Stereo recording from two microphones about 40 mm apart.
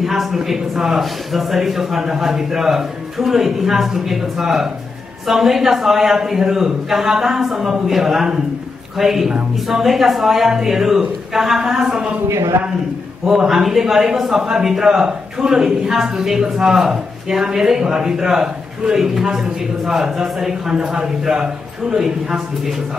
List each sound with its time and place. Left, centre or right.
0.0 s a woman's voice: centre
13.2 s a woman's voice: centre